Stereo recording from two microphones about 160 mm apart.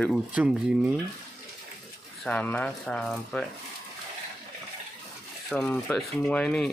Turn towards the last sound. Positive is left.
turn(degrees=5)  # may be behind; listen again after turning